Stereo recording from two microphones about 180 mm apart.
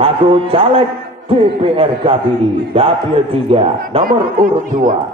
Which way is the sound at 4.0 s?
50° right (ahead or behind).